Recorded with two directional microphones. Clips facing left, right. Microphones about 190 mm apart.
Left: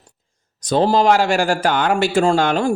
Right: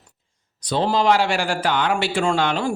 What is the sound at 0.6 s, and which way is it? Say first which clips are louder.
A man's voice: left 5 dB; 45° left (ahead or behind).